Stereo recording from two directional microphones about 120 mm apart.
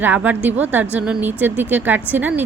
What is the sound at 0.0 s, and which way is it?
Speech, 15° right (ahead or behind).